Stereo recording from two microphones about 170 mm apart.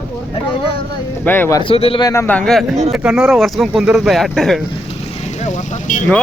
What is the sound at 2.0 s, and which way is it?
Speech, 15° left (ahead or behind).